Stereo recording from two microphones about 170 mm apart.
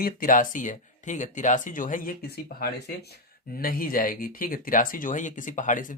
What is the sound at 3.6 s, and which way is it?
Speech, 55° left (ahead or behind).